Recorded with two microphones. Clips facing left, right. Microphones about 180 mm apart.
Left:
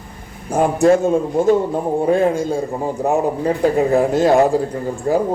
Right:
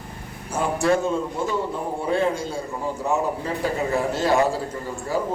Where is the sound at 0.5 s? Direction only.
55° left (ahead or behind).